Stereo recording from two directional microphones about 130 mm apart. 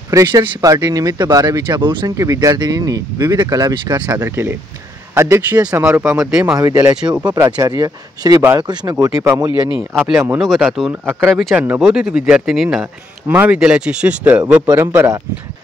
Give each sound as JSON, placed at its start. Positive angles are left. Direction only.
{"t": 0.1, "sound": "speech", "side_deg": -30}
{"t": 2.1, "sound": "speech", "side_deg": -25}
{"t": 6.1, "sound": "speech", "side_deg": -5}
{"t": 6.5, "sound": "speech", "side_deg": -25}
{"t": 7.0, "sound": "speech", "side_deg": -5}
{"t": 7.4, "sound": "speech", "side_deg": -30}
{"t": 9.8, "sound": "speech", "side_deg": -5}
{"t": 10.1, "sound": "speech", "side_deg": -15}
{"t": 10.4, "sound": "speech", "side_deg": 0}
{"t": 10.9, "sound": "speech", "side_deg": -15}
{"t": 11.3, "sound": "speech", "side_deg": 0}
{"t": 15.0, "sound": "speech", "side_deg": -30}